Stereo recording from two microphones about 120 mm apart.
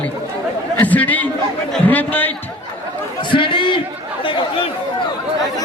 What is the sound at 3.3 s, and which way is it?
Chatter, 45° left (ahead or behind).